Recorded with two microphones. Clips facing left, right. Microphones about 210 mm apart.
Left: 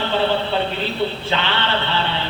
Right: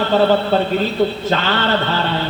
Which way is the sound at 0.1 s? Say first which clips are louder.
Right 6 dB; 45° right (ahead or behind).